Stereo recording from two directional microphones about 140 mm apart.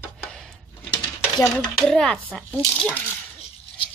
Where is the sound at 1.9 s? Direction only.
5° left (ahead or behind).